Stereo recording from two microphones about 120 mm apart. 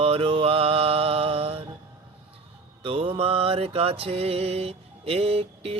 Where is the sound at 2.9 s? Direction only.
55° right (ahead or behind).